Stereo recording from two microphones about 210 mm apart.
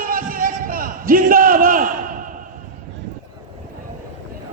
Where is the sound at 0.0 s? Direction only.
40° right (ahead or behind).